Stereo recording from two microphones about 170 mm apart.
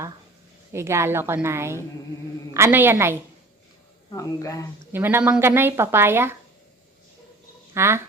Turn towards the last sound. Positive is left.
turn(degrees=-15)  # may be behind; listen again after turning